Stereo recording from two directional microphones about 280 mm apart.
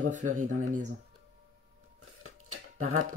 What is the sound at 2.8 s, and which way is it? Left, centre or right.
Speech, right.